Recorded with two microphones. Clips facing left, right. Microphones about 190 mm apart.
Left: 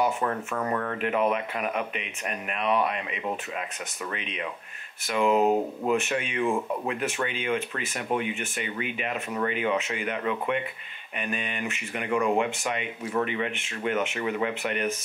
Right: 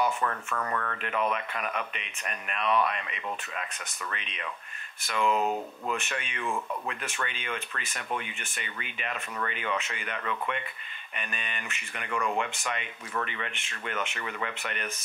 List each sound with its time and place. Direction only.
0.2 s speech: 15° left (ahead or behind)
6.4 s speech: 20° left (ahead or behind)
7.0 s speech: 5° left (ahead or behind)